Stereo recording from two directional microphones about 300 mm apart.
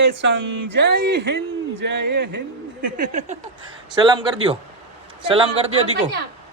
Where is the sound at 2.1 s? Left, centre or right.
Right.